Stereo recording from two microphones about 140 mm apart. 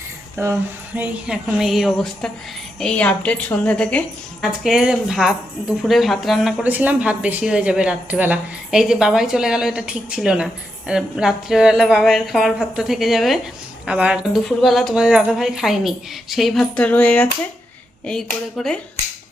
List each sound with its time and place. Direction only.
0.4 s a woman's voice: 15° right (ahead or behind); by 4.4 s 10° left (ahead or behind)
4.4 s a woman's voice: 5° right (ahead or behind)